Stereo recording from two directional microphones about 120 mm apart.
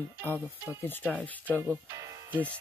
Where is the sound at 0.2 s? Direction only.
15° left (ahead or behind).